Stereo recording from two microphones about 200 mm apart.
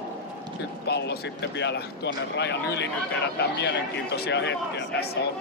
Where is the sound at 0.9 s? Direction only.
55° left (ahead or behind).